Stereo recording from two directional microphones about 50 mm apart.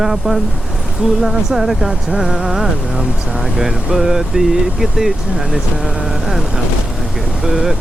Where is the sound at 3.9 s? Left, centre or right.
Centre.